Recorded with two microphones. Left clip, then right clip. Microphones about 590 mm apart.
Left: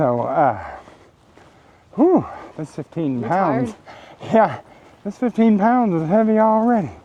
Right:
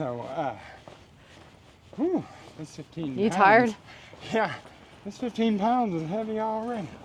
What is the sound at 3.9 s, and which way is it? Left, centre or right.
Speech, left.